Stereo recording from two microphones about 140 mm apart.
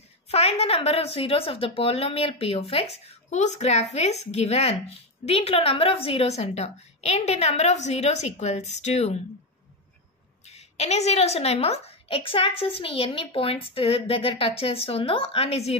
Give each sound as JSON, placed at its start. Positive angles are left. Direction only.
{"t": 0.3, "sound": "a woman's voice", "side_deg": 45}
{"t": 10.4, "sound": "a woman's voice", "side_deg": 50}